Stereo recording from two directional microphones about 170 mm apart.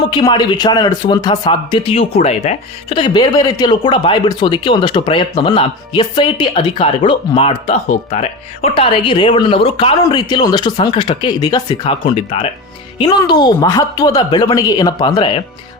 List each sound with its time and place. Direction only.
0.1 s a man's voice: 25° left (ahead or behind)